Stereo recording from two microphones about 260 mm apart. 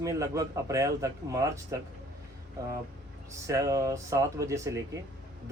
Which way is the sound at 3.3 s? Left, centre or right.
Centre.